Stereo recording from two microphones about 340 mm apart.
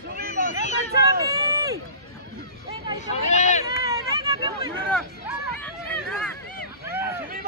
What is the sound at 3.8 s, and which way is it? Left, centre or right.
Hubbub, centre.